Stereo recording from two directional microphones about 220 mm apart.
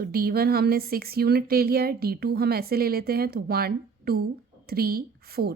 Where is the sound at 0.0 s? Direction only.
40° right (ahead or behind).